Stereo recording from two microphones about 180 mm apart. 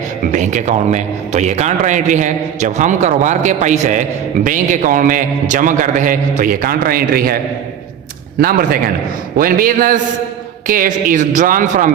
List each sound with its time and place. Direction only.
0.3 s a man's voice: 40° right (ahead or behind)
8.4 s a man's voice: 55° right (ahead or behind)